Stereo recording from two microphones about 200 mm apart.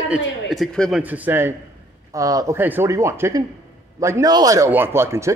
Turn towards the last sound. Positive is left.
turn(degrees=-15)  # may be behind; listen again after turning